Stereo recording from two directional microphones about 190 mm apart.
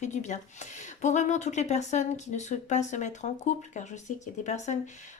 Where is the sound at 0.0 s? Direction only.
40° left (ahead or behind).